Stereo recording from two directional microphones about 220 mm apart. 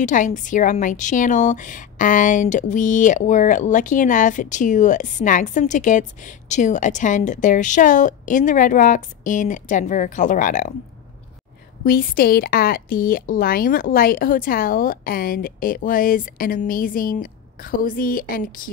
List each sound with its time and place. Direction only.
0.0 s a woman's voice: 35° left (ahead or behind)
11.8 s a woman's voice: 40° left (ahead or behind)